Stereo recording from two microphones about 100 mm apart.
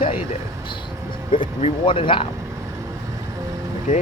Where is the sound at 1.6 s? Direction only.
80° left; by 2.3 s 60° left (ahead or behind).